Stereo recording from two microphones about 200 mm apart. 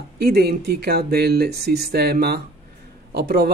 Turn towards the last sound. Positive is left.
turn(degrees=-55)  # may be behind; listen again after turning